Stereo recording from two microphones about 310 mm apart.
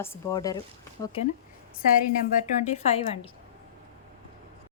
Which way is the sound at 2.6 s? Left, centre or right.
Left.